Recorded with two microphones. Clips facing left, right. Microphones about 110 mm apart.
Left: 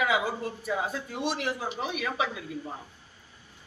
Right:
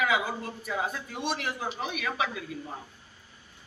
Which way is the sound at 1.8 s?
30° left (ahead or behind).